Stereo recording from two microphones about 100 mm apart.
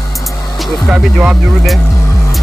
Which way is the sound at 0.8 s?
10° right (ahead or behind).